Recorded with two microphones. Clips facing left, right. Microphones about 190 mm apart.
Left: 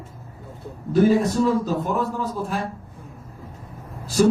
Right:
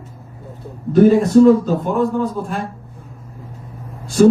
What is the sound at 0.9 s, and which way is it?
Speech, 60° right (ahead or behind).